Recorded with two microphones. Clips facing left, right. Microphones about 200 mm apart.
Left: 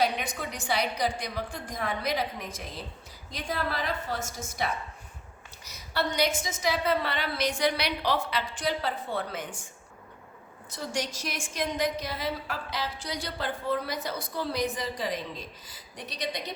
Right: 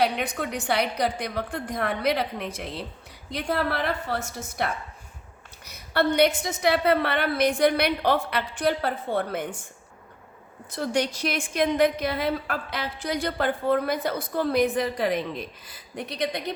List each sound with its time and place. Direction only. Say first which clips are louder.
0.0 s a woman's voice: right 4 dB; 60° right (ahead or behind)
10.7 s a woman's voice: right 7 dB; 60° right (ahead or behind)